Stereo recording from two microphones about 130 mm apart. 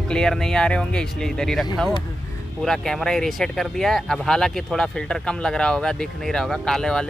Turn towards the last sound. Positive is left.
turn(degrees=5)  # may be behind; listen again after turning